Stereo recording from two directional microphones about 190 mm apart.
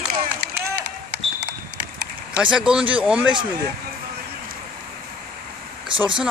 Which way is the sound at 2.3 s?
5° right (ahead or behind).